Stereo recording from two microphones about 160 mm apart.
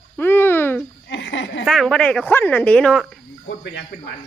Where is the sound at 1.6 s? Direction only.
Centre (ahead or behind).